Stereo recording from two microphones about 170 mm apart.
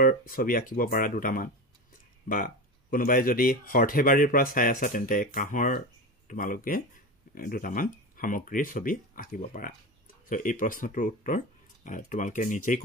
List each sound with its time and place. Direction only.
0.0 s speech: 55° left (ahead or behind)